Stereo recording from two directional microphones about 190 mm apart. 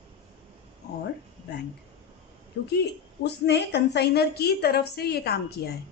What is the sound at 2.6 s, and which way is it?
A woman's voice, 65° left (ahead or behind).